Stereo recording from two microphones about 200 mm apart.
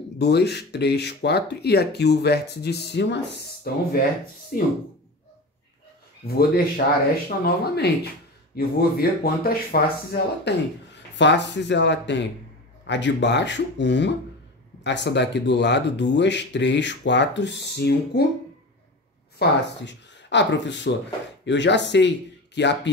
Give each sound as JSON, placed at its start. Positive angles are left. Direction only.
{"t": 0.2, "sound": "speech", "side_deg": 55}
{"t": 4.5, "sound": "speech", "side_deg": 45}
{"t": 6.2, "sound": "speech", "side_deg": 50}
{"t": 11.1, "sound": "speech", "side_deg": 60}
{"t": 19.3, "sound": "speech", "side_deg": 60}